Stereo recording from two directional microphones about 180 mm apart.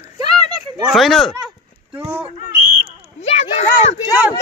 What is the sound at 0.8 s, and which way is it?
Speech, centre (ahead or behind).